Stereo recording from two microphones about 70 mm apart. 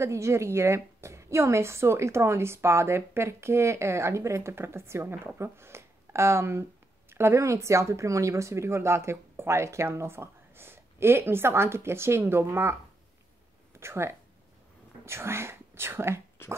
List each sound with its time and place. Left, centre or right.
0.0 s a woman's voice: right
13.7 s speech: right
16.4 s dog: left